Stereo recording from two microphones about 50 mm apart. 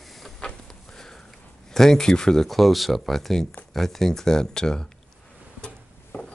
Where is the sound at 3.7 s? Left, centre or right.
Centre.